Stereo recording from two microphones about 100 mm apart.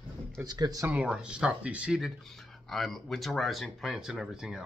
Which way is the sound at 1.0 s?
10° right (ahead or behind).